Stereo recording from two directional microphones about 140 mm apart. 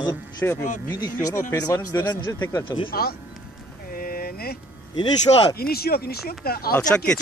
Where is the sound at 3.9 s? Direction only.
90° left.